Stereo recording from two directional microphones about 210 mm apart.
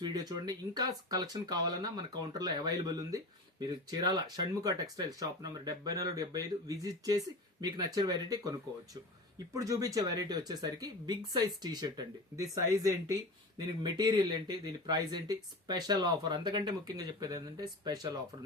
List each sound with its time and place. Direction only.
0.0 s speech: 20° right (ahead or behind)
9.6 s speech: 15° right (ahead or behind)